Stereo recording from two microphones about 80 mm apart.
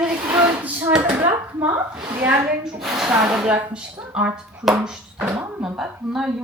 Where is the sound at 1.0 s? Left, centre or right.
Right.